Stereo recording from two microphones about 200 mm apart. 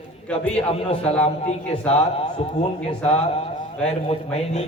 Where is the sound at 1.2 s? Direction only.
30° left (ahead or behind).